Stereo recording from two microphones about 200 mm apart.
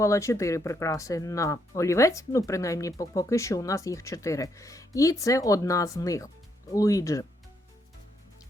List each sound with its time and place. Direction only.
0.0 s speech: 15° left (ahead or behind)